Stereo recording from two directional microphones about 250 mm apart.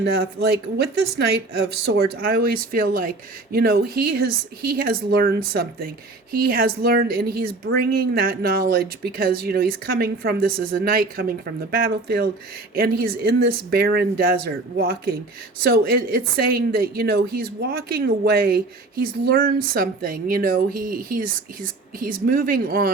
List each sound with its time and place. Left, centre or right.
0.0 s a woman's voice: right